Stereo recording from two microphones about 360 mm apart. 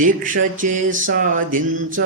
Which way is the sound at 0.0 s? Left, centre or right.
Right.